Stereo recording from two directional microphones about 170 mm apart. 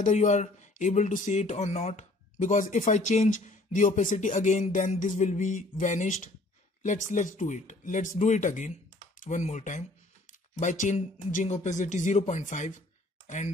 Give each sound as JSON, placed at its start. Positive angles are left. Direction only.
{"t": 0.0, "sound": "speech", "side_deg": 45}